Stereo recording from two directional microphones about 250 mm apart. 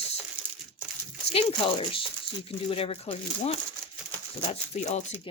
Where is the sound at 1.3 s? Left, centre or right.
Left.